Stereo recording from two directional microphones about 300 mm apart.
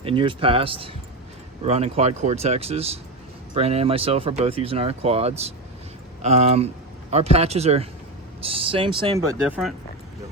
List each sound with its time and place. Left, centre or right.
0.0 s speech: centre
9.5 s speech: centre